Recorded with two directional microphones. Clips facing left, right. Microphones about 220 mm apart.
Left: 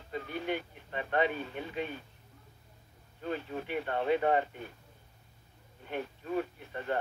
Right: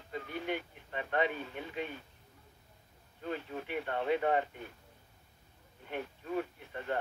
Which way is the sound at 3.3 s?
35° left (ahead or behind).